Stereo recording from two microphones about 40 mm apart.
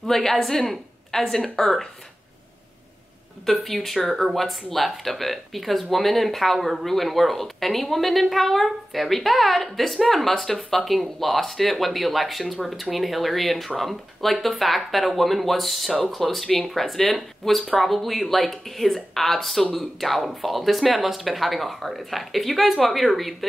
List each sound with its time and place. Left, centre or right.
0.0 s a woman's voice: centre
3.4 s speech: centre